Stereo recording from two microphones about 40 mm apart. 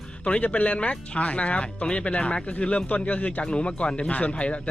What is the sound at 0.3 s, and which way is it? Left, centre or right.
Speech, left.